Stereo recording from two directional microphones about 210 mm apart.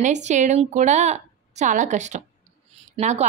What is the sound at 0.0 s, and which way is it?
A woman's voice, 35° right (ahead or behind).